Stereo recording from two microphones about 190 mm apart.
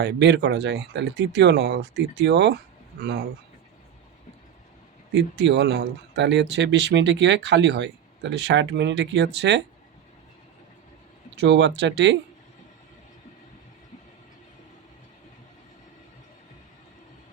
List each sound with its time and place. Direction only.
0.0 s speech: 65° right (ahead or behind)
3.0 s speech: 55° right (ahead or behind)
5.1 s speech: 65° right (ahead or behind)
11.3 s speech: 70° right (ahead or behind)